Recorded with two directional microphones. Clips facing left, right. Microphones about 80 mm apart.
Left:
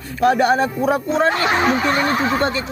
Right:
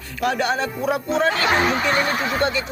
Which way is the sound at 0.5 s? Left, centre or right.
Left.